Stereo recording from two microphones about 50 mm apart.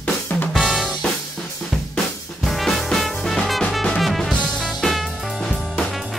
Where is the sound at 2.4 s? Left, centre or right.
Centre.